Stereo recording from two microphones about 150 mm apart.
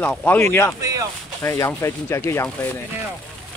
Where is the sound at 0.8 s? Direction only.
20° right (ahead or behind).